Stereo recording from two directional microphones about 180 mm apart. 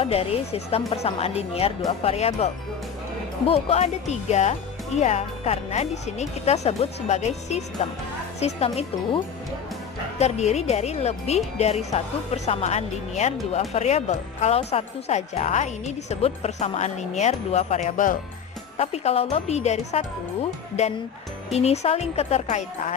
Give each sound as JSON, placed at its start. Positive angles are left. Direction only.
{"t": 0.0, "sound": "speech", "side_deg": 35}
{"t": 18.8, "sound": "speech", "side_deg": 35}
{"t": 21.5, "sound": "speech", "side_deg": 35}